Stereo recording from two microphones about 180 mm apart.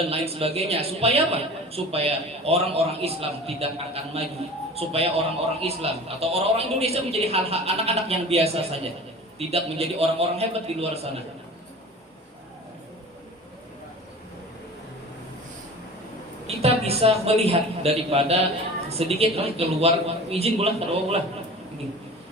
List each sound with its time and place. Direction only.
0.1 s a man's voice: 35° right (ahead or behind)
16.6 s a man's voice: 35° right (ahead or behind)